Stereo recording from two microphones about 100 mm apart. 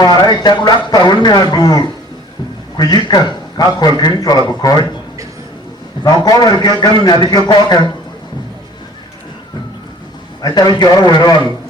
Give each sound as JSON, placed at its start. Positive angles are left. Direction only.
{"t": 0.4, "sound": "a man's voice", "side_deg": 45}
{"t": 6.2, "sound": "a man's voice", "side_deg": 40}
{"t": 10.4, "sound": "a man's voice", "side_deg": 45}